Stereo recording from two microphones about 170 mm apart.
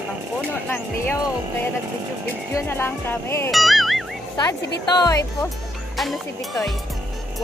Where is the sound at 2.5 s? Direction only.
15° left (ahead or behind).